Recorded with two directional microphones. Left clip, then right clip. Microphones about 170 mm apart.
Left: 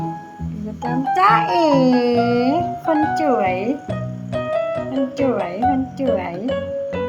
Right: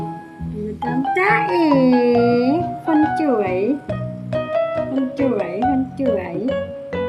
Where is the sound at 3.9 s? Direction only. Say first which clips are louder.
Right 2 dB; centre (ahead or behind).